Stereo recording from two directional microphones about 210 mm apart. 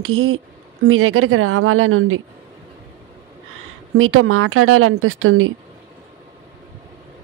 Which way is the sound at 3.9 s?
90° right.